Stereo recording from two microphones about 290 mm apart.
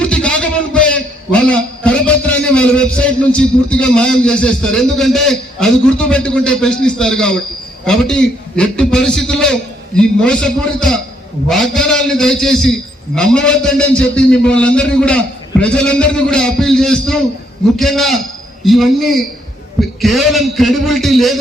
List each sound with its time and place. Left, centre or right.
0.0 s a man's voice: centre